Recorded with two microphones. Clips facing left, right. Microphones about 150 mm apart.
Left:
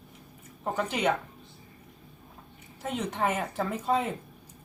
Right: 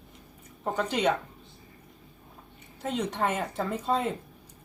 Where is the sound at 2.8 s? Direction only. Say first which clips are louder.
Right 1 dB; 5° left (ahead or behind).